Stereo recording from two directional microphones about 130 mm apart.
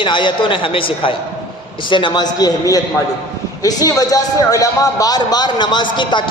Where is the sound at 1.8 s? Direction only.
40° left (ahead or behind).